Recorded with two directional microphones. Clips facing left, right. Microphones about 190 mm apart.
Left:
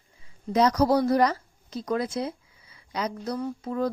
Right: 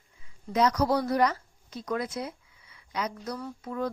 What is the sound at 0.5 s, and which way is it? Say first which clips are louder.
Speech: left 4 dB; 35° left (ahead or behind).